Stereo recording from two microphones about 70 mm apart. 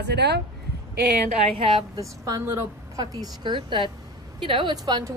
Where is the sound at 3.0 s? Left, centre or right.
Right.